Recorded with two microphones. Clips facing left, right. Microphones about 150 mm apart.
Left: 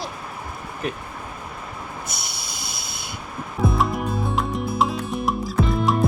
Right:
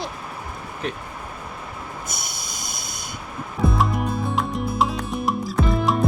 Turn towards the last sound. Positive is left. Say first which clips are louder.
# even
turn(degrees=0)  # may be behind; listen again after turning